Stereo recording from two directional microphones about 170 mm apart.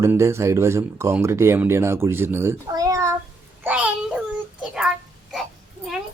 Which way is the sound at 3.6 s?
10° right (ahead or behind).